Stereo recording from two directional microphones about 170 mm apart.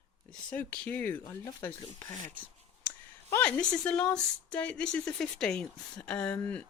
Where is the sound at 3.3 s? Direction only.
5° left (ahead or behind).